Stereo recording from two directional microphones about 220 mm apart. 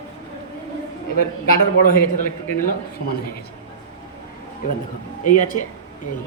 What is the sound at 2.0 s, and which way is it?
Speech, 40° left (ahead or behind).